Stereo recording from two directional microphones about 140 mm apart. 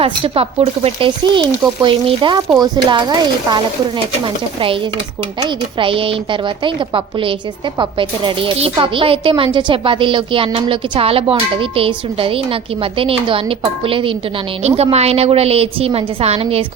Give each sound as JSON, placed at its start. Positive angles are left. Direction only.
{"t": 0.0, "sound": "speech", "side_deg": -45}
{"t": 5.4, "sound": "a woman's voice", "side_deg": -40}